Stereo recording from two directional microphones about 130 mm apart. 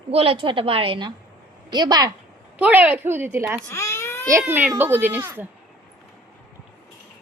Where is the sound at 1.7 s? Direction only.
35° right (ahead or behind).